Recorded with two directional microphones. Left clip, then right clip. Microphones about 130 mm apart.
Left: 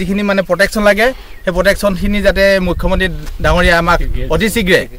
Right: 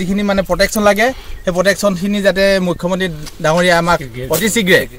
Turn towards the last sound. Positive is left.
turn(degrees=0)  # may be behind; listen again after turning